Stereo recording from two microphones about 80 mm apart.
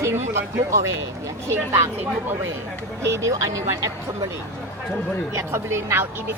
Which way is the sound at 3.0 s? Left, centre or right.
Right.